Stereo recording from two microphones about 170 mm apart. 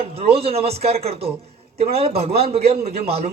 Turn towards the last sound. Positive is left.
turn(degrees=-35)  # may be behind; listen again after turning